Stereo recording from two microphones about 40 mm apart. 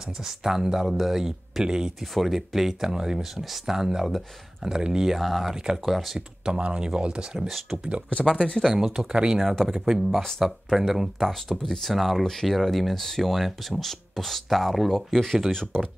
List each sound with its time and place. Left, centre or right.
0.2 s speech: centre
1.6 s speech: centre
2.1 s speech: centre
5.1 s speech: centre; by 7.2 s right
7.3 s speech: centre
8.4 s speech: centre
8.7 s speech: centre
11.9 s speech: centre
14.9 s speech: centre